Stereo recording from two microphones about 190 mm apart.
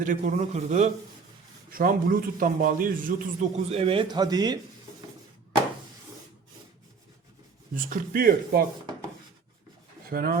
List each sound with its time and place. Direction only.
0.0 s a man's voice: 45° right (ahead or behind)
3.7 s speech: 30° right (ahead or behind)
7.9 s a man's voice: 50° right (ahead or behind)
10.1 s speech: 55° right (ahead or behind)